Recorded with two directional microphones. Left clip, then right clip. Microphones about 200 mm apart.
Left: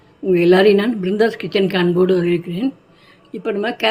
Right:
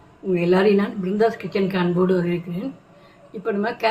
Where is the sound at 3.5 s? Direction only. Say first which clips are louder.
Left 3 dB; 45° left (ahead or behind).